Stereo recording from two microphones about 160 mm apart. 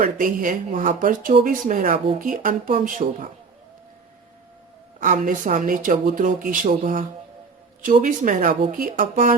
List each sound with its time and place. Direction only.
0.0 s speech: 55° right (ahead or behind)
4.9 s speech: 55° right (ahead or behind)